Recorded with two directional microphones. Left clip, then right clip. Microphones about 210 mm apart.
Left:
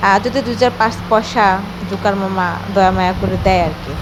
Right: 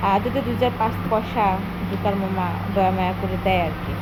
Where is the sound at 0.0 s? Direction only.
15° left (ahead or behind).